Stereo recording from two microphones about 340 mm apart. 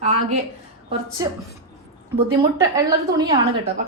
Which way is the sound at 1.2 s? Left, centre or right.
Centre.